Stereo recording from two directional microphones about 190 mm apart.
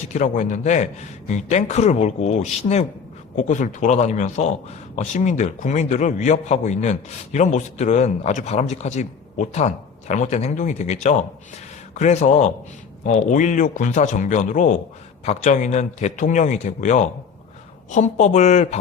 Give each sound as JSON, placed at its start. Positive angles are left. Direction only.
{"t": 0.0, "sound": "a man's voice", "side_deg": 40}